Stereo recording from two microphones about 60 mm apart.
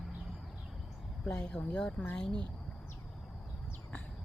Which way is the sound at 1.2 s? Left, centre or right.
Centre.